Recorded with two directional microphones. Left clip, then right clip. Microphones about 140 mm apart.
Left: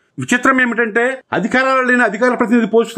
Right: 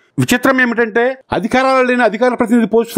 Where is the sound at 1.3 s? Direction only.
60° right (ahead or behind).